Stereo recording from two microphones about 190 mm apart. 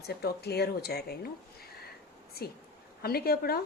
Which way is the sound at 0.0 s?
55° left (ahead or behind).